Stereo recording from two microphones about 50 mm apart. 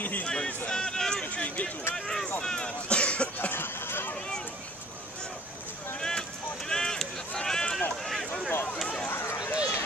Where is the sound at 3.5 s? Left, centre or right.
Left.